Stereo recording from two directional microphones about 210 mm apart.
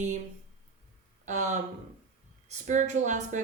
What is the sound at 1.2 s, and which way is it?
Speech, 35° right (ahead or behind).